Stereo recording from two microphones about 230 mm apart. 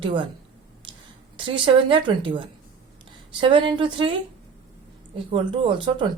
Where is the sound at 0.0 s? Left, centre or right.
Right.